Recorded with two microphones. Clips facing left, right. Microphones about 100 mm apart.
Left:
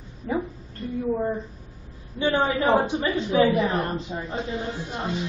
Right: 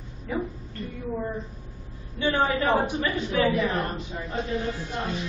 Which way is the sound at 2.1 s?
20° left (ahead or behind).